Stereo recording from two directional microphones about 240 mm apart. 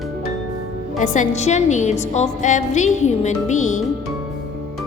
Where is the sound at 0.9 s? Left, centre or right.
Left.